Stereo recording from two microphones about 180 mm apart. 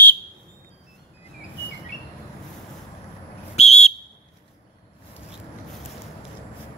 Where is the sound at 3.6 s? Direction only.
35° left (ahead or behind).